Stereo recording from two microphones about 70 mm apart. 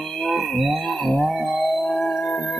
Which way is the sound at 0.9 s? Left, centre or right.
Left.